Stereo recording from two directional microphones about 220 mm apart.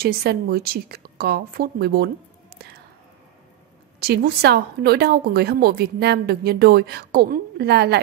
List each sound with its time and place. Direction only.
0.0 s a woman's voice: 45° right (ahead or behind)
4.0 s a woman's voice: 45° right (ahead or behind)